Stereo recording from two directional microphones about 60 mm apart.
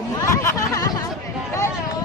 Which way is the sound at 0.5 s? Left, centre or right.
Left.